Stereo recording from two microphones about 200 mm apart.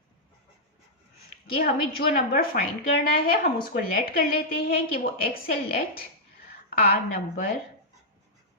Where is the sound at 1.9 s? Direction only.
50° left (ahead or behind).